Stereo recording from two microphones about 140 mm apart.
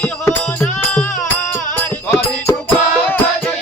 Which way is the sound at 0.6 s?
15° left (ahead or behind).